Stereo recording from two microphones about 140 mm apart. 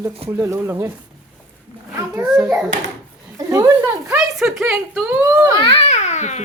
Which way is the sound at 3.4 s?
25° right (ahead or behind).